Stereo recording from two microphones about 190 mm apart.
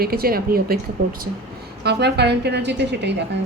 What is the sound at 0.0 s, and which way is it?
Speech, 50° right (ahead or behind).